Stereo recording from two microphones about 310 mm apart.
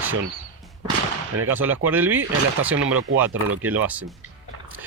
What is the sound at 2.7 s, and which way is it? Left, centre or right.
Speech, right.